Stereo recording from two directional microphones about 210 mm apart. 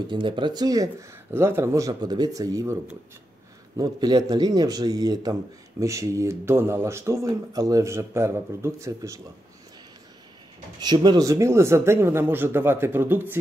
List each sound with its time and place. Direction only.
0.1 s speech: 20° right (ahead or behind)
10.8 s speech: 20° right (ahead or behind)